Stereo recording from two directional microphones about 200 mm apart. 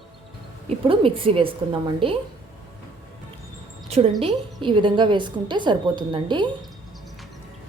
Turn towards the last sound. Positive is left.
turn(degrees=-25)  # may be behind; listen again after turning